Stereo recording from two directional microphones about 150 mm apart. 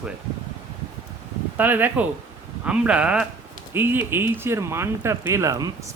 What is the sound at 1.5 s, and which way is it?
Speech, 10° right (ahead or behind).